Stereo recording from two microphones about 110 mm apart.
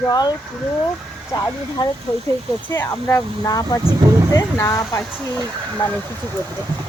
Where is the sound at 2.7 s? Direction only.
25° left (ahead or behind).